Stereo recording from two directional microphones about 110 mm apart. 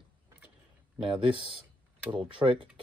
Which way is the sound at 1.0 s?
50° right (ahead or behind).